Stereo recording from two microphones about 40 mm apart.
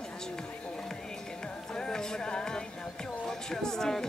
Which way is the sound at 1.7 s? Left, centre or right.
Centre.